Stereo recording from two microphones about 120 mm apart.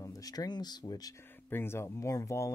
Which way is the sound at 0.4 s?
35° left (ahead or behind).